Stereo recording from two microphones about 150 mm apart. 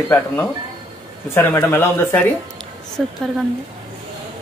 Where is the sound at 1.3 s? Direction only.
15° left (ahead or behind).